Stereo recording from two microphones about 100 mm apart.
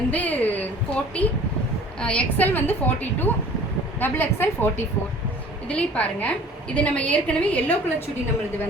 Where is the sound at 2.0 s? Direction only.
10° left (ahead or behind).